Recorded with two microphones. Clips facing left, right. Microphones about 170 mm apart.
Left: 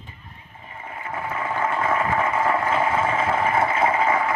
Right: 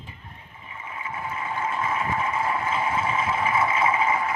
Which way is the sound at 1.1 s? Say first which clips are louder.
Left 4 dB; 70° left (ahead or behind).